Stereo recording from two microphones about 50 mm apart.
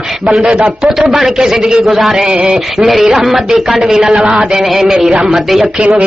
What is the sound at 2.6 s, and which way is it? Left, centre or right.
Speech, centre.